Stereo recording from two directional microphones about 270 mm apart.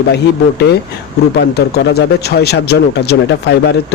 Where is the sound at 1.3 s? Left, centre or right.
Left.